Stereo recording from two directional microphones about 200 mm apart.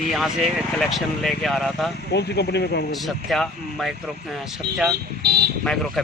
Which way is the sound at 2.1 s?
55° left (ahead or behind).